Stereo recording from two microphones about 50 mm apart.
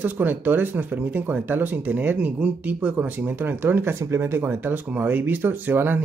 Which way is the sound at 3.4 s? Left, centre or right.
Right.